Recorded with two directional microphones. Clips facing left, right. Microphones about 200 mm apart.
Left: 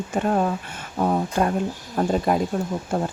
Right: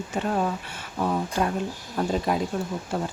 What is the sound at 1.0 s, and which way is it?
Speech, 50° left (ahead or behind).